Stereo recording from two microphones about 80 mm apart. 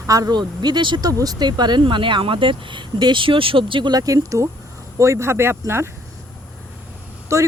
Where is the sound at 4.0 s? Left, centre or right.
Right.